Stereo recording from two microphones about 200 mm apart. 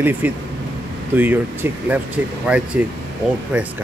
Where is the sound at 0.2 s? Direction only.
10° right (ahead or behind).